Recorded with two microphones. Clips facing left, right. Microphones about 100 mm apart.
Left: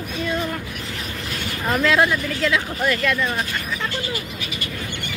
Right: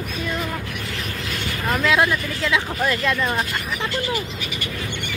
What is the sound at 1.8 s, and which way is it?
Speech, 10° right (ahead or behind).